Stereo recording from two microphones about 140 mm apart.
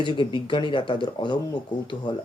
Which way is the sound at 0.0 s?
35° left (ahead or behind).